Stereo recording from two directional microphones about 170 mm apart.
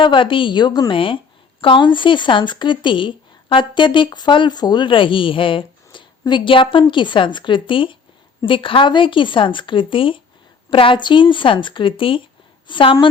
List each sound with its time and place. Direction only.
0.0 s speech: 30° left (ahead or behind)